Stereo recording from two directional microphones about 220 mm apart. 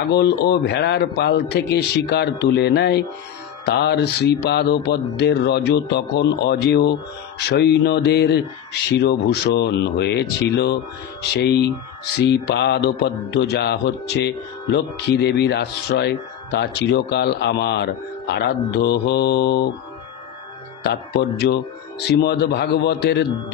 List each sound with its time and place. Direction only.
0.5 s speech: 50° left (ahead or behind)
20.8 s speech: 50° left (ahead or behind)